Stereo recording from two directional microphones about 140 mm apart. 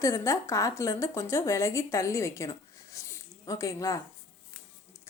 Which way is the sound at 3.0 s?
20° left (ahead or behind).